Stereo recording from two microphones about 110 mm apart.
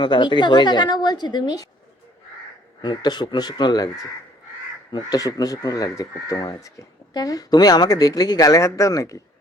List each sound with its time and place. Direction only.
0.0 s a woman's voice: 45° left (ahead or behind)
2.8 s speech: 40° left (ahead or behind)